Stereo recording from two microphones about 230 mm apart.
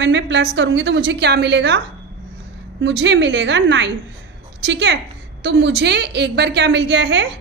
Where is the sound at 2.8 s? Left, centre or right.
Right.